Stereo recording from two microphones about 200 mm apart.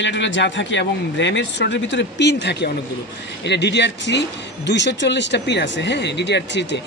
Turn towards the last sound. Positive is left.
turn(degrees=60)  # may be behind; listen again after turning